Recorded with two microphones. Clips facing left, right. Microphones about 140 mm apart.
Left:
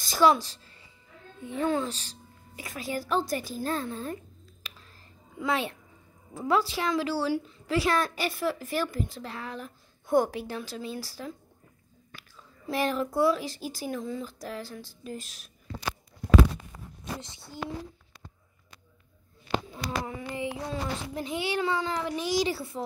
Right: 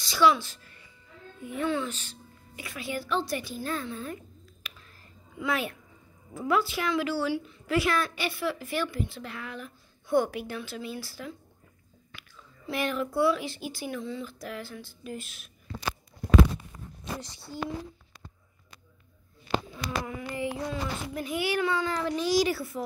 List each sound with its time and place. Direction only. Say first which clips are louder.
0.0 s a woman's voice: left 1 dB; 45° left (ahead or behind)
4.6 s a sound: even; 30° left (ahead or behind)
5.4 s a child's voice: left 1 dB; 30° left (ahead or behind)
17.2 s speech: right 3 dB; 20° left (ahead or behind)
19.7 s a child's voice: even; 30° left (ahead or behind)